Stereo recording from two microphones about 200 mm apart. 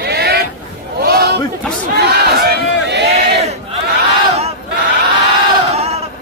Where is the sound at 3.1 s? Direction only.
30° right (ahead or behind).